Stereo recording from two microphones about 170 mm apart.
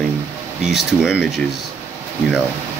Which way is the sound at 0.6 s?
5° right (ahead or behind).